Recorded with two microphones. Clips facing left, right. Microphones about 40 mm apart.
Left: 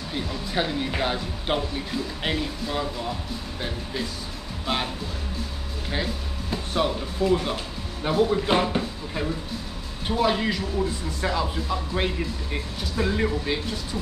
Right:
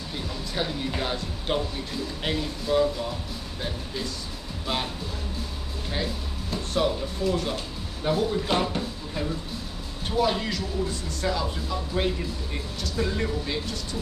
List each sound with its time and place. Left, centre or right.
0.1 s speech: centre
6.5 s speech: centre